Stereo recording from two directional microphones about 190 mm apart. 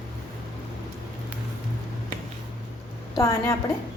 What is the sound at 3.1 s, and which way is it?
Speech, 15° left (ahead or behind).